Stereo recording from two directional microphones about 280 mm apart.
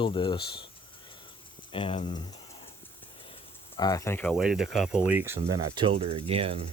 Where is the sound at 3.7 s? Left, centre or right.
Centre.